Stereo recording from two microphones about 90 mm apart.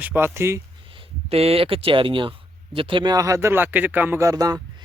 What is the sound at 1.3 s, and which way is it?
Speech, 90° right.